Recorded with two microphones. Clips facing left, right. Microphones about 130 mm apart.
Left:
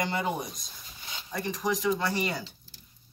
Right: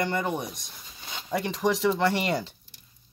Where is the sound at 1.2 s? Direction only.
90° right; by 2.3 s 70° right (ahead or behind).